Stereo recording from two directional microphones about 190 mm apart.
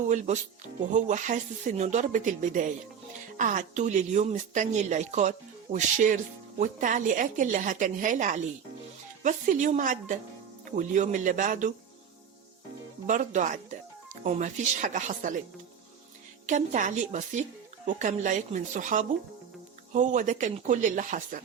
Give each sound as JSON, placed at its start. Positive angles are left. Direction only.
{"t": 0.1, "sound": "a woman's voice", "side_deg": -40}
{"t": 13.1, "sound": "speech", "side_deg": -40}
{"t": 16.5, "sound": "speech", "side_deg": -40}